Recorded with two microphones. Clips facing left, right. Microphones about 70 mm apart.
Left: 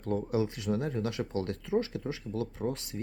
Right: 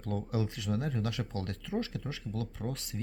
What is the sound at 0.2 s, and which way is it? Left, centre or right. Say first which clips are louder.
Speech: left 4 dB; left.